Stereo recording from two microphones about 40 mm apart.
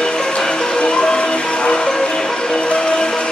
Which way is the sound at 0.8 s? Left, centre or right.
Left.